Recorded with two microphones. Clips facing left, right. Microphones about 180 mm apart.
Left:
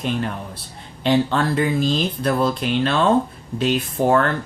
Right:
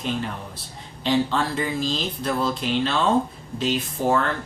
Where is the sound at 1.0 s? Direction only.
60° left (ahead or behind).